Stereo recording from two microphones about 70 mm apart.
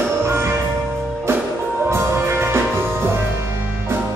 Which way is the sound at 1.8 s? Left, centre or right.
Right.